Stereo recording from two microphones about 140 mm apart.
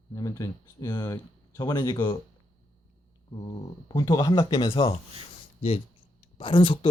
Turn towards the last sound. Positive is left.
turn(degrees=35)  # may be behind; listen again after turning